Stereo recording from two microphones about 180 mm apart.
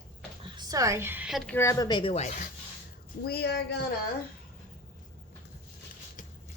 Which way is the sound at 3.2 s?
60° left (ahead or behind).